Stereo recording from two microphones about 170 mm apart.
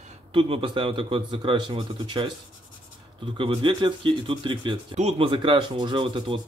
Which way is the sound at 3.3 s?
30° right (ahead or behind).